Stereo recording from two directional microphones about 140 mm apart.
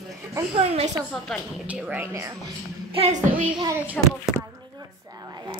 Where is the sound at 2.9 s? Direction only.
50° right (ahead or behind).